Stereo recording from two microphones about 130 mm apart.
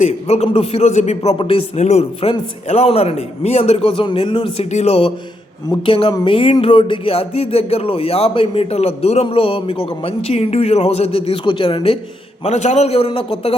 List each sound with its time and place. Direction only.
0.0 s a man's voice: 55° left (ahead or behind)
1.4 s music: 45° left (ahead or behind)
1.7 s a man's voice: 60° left (ahead or behind)
2.6 s music: 55° left (ahead or behind)
4.7 s music: 55° left (ahead or behind)
12.4 s music: 60° left (ahead or behind); by 13.5 s 45° left (ahead or behind)